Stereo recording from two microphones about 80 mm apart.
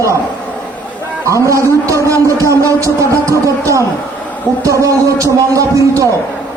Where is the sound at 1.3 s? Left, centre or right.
Right.